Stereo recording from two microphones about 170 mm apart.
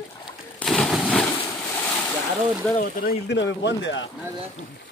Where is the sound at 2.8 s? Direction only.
75° left (ahead or behind); by 4.1 s 90° left.